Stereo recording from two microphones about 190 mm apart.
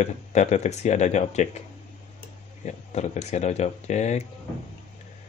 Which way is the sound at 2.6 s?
35° left (ahead or behind).